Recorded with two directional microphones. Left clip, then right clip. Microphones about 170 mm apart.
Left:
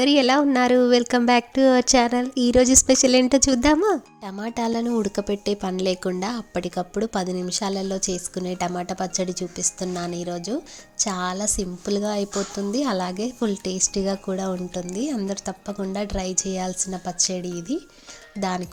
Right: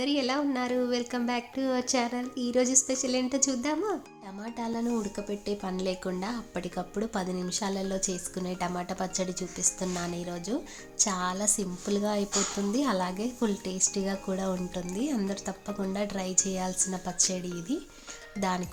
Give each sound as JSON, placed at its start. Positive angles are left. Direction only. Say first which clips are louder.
{"t": 0.0, "sound": "speech", "louder": "left 11 dB", "side_deg": 45}